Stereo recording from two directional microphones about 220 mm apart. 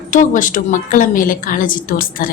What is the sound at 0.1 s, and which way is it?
A woman's voice, 35° left (ahead or behind).